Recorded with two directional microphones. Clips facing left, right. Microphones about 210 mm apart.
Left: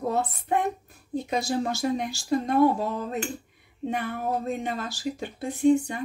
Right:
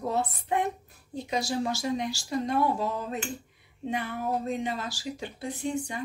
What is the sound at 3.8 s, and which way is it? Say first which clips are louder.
Cutlery: left 2 dB; 55° left (ahead or behind).